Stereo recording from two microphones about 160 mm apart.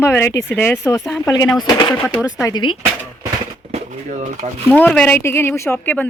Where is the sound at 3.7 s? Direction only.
45° right (ahead or behind).